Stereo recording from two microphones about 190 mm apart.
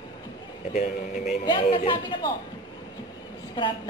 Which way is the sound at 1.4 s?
25° left (ahead or behind).